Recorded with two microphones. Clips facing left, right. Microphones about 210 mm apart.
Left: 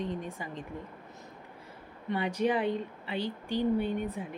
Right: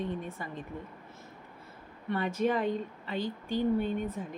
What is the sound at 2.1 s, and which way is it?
A woman's voice, 15° left (ahead or behind).